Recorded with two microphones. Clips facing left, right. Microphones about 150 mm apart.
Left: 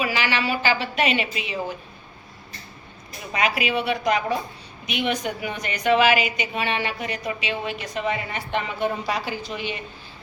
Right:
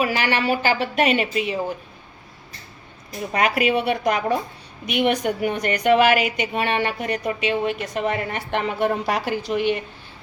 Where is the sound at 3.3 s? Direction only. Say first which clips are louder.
Right 4 dB; 55° right (ahead or behind).